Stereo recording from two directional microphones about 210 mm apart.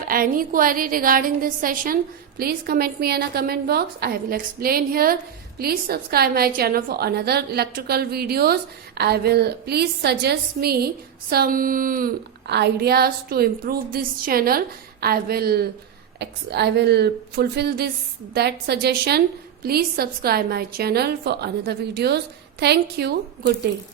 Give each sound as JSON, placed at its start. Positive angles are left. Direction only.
{"t": 0.0, "sound": "a woman's voice", "side_deg": -45}